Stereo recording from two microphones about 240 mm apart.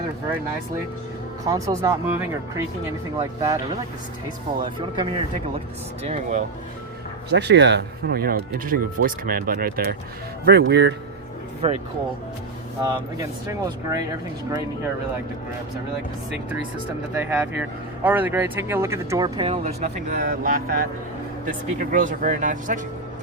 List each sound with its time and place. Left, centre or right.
1.5 s speech: centre
6.0 s speech: right
7.3 s speech: right
11.6 s speech: right
12.8 s speech: centre
17.2 s speech: centre; by 22.8 s right